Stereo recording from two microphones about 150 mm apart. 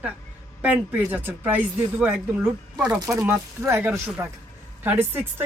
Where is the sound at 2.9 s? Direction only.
20° right (ahead or behind).